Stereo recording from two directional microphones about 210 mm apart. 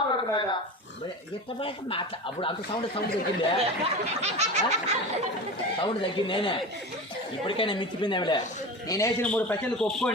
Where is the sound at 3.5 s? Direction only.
30° right (ahead or behind).